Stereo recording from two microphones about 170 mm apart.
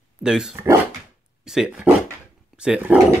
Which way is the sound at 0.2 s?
5° right (ahead or behind).